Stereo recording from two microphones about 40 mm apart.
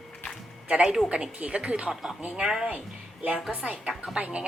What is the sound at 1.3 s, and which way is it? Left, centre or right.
Speech, right.